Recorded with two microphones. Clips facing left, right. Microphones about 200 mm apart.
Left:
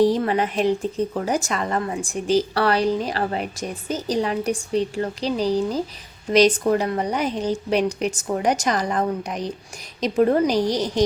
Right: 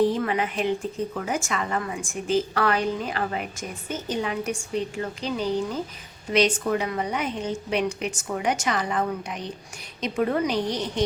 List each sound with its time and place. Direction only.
0.1 s a woman's voice: 35° left (ahead or behind)